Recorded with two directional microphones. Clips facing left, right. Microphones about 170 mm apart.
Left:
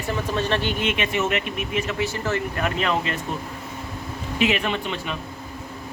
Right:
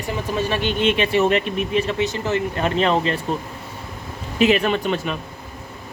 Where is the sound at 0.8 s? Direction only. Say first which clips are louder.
Right 6 dB; 30° right (ahead or behind).